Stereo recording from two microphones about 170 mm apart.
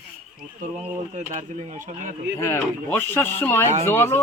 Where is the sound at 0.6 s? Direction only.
45° right (ahead or behind).